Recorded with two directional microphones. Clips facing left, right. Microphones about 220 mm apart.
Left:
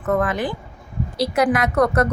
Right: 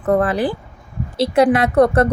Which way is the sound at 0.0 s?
35° right (ahead or behind).